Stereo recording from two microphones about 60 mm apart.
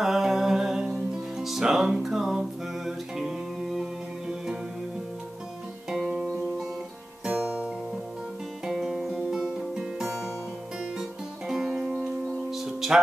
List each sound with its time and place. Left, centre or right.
0.0 s music: centre
5.9 s guitar: centre
7.2 s music: centre